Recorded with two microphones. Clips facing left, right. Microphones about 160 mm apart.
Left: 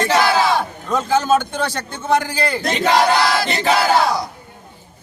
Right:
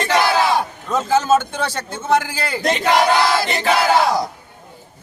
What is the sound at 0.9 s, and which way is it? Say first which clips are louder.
A man's voice: even; 5° right (ahead or behind).